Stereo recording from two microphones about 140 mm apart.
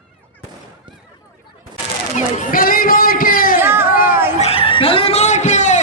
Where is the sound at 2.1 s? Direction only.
80° left.